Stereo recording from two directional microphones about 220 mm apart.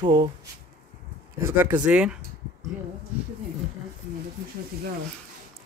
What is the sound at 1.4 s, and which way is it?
Speech, 10° right (ahead or behind).